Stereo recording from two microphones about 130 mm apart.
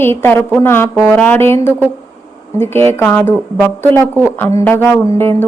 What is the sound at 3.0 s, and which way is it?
Speech, 15° left (ahead or behind).